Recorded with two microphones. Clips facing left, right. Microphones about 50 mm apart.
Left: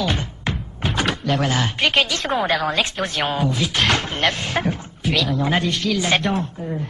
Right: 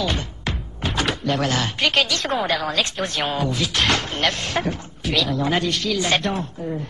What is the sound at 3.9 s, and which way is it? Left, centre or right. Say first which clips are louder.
Speech: left 1 dB; centre.